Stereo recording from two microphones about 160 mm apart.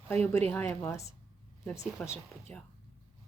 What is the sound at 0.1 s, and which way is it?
A woman's voice, 10° left (ahead or behind).